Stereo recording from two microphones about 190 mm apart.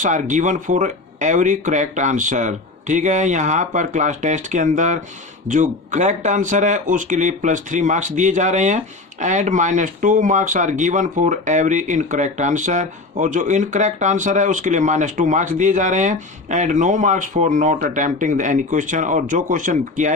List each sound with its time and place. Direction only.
0.0 s speech: 40° right (ahead or behind)